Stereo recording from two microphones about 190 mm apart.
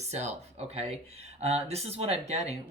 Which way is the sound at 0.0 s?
35° right (ahead or behind).